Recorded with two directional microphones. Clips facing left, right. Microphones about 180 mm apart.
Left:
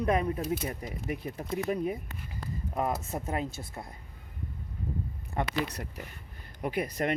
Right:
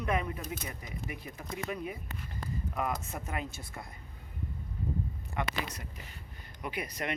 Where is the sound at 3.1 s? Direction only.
35° left (ahead or behind).